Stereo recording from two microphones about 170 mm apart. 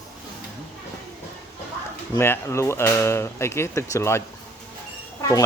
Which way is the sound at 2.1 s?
15° left (ahead or behind).